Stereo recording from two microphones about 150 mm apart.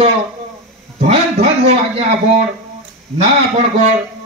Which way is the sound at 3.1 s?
50° right (ahead or behind).